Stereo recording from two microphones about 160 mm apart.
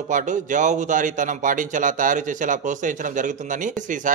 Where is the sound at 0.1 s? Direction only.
50° right (ahead or behind).